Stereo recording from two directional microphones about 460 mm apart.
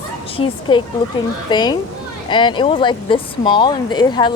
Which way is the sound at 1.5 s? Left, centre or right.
Centre.